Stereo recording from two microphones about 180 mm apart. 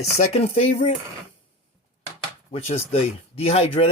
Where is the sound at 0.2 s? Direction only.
40° left (ahead or behind).